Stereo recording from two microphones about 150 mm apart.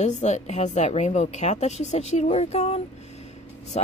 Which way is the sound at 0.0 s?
50° left (ahead or behind).